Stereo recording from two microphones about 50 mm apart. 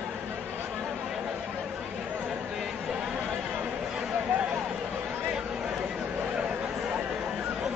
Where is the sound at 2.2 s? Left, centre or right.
Centre.